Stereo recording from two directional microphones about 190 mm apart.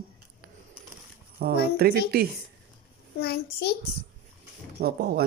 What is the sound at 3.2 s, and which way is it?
Speech, 55° left (ahead or behind).